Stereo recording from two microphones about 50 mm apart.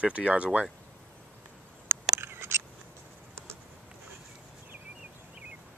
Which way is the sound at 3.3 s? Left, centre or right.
Right.